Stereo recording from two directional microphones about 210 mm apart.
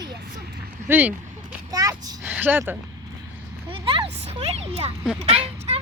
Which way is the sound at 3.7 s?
25° right (ahead or behind).